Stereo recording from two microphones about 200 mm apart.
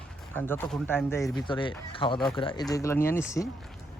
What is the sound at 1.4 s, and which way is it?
Speech, 25° left (ahead or behind).